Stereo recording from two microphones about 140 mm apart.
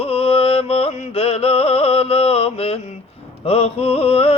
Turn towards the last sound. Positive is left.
turn(degrees=45)  # may be behind; listen again after turning